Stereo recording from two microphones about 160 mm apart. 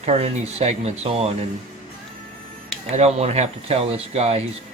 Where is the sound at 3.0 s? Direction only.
40° right (ahead or behind).